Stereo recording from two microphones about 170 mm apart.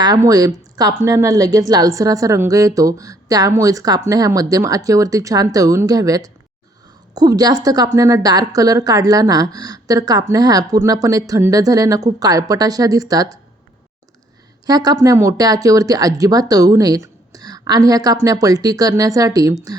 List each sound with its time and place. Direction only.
0.0 s speech: 20° right (ahead or behind)
14.7 s speech: 25° right (ahead or behind)